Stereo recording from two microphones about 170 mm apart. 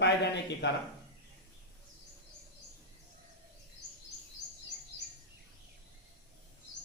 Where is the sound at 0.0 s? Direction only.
90° left.